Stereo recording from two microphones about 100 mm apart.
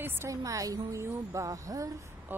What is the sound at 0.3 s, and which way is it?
A woman's voice, 35° right (ahead or behind).